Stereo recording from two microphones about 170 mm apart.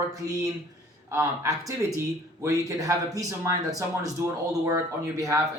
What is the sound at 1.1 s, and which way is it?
Speech, 20° right (ahead or behind).